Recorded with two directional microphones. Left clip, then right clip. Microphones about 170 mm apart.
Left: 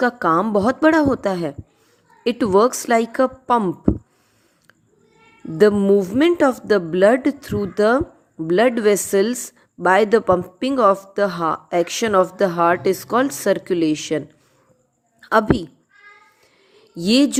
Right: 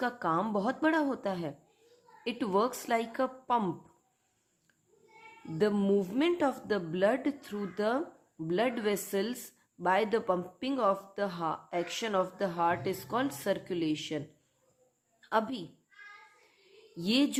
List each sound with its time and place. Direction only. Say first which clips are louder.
0.0 s a woman's voice: left 14 dB; 40° left (ahead or behind)
5.5 s a woman's voice: left 14 dB; 35° left (ahead or behind)
17.0 s a woman's voice: left 13 dB; 40° left (ahead or behind)